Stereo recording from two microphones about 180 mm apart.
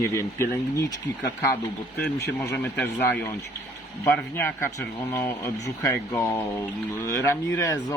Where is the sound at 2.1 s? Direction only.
10° left (ahead or behind).